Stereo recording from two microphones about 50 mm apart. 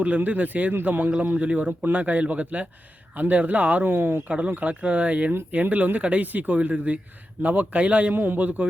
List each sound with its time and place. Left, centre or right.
0.2 s speech: right
1.3 s speech: right
4.3 s speech: right
8.1 s speech: right